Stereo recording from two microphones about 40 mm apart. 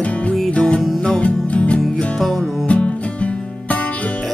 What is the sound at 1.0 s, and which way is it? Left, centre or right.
Music, left.